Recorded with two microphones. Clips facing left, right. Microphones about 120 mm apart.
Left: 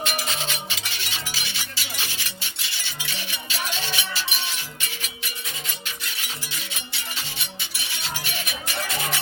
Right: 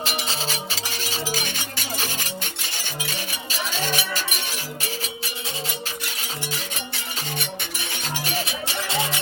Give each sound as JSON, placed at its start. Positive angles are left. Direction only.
{"t": 0.0, "sound": "music", "side_deg": -30}
{"t": 6.5, "sound": "music", "side_deg": -50}
{"t": 8.4, "sound": "music", "side_deg": -30}